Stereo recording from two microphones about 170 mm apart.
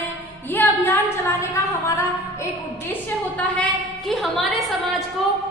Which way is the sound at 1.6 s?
15° left (ahead or behind).